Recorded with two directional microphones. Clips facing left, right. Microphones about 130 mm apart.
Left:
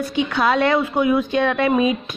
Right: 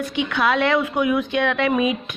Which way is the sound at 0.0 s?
35° left (ahead or behind).